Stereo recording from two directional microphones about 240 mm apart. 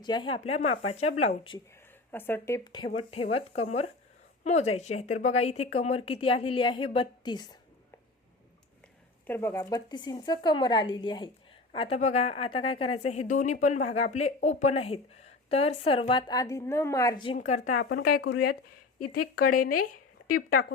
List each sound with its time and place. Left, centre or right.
0.0 s a woman's voice: centre
2.1 s a woman's voice: centre
9.2 s a woman's voice: centre
17.3 s a woman's voice: left
17.8 s speech: left
18.9 s speech: left